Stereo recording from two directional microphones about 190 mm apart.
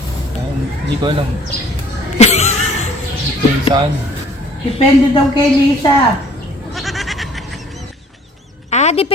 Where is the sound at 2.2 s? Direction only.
35° left (ahead or behind).